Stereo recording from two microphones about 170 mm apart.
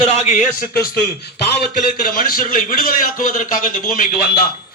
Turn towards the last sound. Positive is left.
turn(degrees=55)  # may be behind; listen again after turning